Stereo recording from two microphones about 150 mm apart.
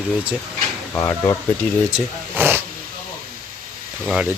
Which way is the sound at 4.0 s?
5° right (ahead or behind).